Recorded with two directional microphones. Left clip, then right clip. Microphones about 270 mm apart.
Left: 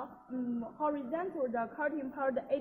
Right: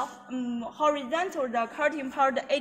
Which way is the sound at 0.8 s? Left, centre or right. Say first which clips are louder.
Right 9 dB; centre.